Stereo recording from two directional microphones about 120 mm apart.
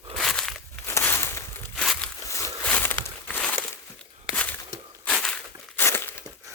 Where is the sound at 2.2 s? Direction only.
25° left (ahead or behind).